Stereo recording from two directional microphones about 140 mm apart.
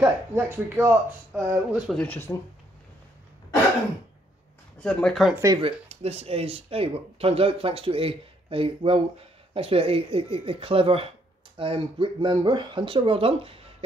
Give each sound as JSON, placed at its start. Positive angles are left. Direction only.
{"t": 0.0, "sound": "speech", "side_deg": -15}
{"t": 1.8, "sound": "speech", "side_deg": 0}
{"t": 2.0, "sound": "speech", "side_deg": 15}
{"t": 4.7, "sound": "speech", "side_deg": 5}
{"t": 5.6, "sound": "speech", "side_deg": -45}